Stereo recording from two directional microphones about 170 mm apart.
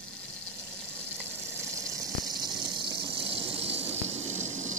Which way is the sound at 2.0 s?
25° right (ahead or behind).